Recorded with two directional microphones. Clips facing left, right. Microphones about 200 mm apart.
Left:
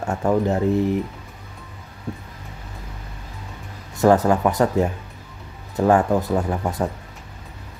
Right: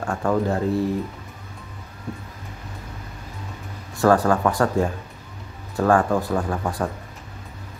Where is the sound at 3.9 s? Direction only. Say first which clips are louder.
Left 2 dB; 20° left (ahead or behind).